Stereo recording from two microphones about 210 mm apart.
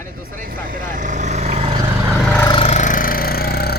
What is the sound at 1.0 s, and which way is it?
Vehicle, 35° right (ahead or behind).